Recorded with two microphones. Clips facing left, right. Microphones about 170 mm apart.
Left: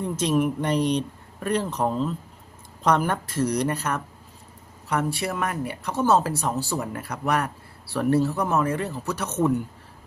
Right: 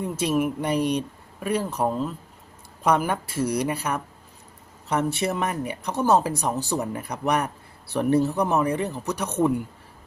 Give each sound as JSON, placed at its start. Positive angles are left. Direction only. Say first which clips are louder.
{"t": 0.0, "sound": "speech", "louder": "left 1 dB", "side_deg": -10}
{"t": 4.9, "sound": "speech", "louder": "right 2 dB", "side_deg": -20}